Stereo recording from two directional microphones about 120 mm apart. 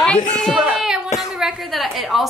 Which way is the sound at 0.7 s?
5° right (ahead or behind).